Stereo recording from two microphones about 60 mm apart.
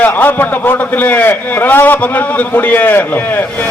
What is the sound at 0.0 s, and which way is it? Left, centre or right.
A man's voice, left.